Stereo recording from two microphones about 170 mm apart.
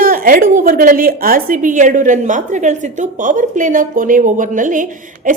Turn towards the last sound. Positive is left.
turn(degrees=-50)  # may be behind; listen again after turning